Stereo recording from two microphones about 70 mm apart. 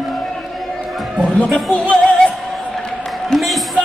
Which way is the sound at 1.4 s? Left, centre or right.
Centre.